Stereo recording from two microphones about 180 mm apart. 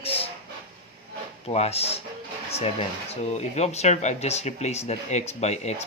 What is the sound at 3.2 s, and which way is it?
Speech, 40° left (ahead or behind).